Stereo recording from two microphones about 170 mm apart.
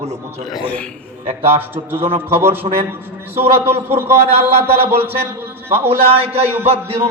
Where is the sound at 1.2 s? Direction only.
35° right (ahead or behind).